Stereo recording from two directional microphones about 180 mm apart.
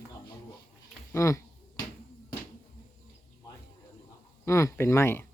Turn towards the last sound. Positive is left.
turn(degrees=15)  # may be behind; listen again after turning